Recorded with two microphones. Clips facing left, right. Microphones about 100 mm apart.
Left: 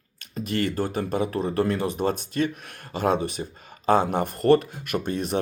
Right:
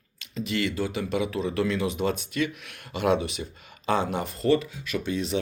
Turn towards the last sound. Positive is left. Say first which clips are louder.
# left 2 dB
turn(degrees=50)  # may be behind; listen again after turning